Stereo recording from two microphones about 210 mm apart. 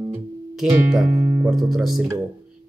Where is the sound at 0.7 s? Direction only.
Centre (ahead or behind).